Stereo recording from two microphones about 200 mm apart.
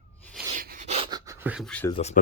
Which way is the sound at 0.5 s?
45° right (ahead or behind).